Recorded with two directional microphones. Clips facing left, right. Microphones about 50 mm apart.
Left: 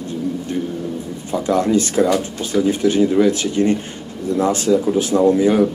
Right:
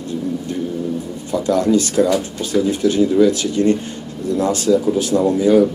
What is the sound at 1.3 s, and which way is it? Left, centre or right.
A man's voice, left.